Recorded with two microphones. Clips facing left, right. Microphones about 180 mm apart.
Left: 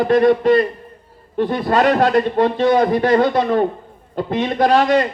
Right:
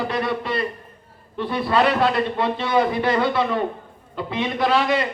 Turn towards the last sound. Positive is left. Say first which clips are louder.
# left 6 dB
turn(degrees=45)  # may be behind; listen again after turning